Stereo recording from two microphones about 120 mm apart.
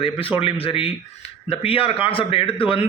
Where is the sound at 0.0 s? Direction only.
50° left (ahead or behind).